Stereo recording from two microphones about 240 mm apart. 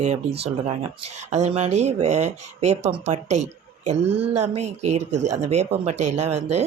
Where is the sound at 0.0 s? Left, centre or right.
Right.